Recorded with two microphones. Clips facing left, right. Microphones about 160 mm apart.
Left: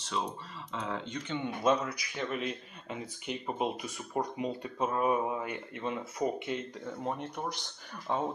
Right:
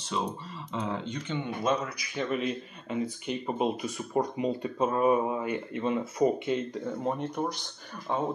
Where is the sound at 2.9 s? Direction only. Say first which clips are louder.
Right 7 dB; 15° left (ahead or behind); by 6.2 s 5° right (ahead or behind).